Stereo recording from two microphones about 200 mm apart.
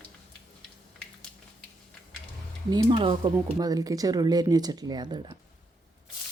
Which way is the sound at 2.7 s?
20° right (ahead or behind).